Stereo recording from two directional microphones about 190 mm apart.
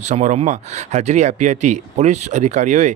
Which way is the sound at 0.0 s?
40° right (ahead or behind).